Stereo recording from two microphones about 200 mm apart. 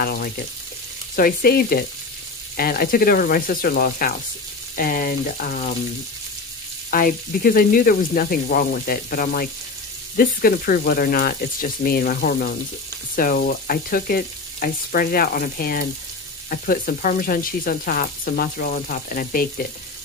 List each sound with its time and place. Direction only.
0.0 s sizzle: 50° left (ahead or behind)
6.9 s sizzle: 45° left (ahead or behind)